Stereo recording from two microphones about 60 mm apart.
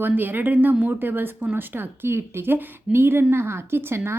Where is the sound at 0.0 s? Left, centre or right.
Right.